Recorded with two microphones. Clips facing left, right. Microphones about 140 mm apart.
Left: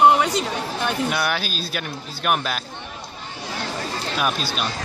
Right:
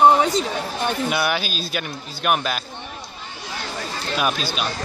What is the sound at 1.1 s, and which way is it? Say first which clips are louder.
Speech: right 1 dB; 5° right (ahead or behind).